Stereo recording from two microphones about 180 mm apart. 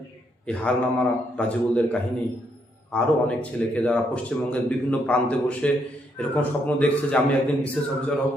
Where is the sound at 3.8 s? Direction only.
5° left (ahead or behind).